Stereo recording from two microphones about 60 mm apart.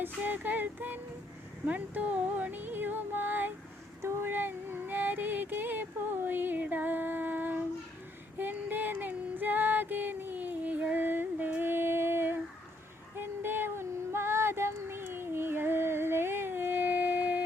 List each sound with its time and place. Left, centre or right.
0.0 s music: right
4.0 s female singing: right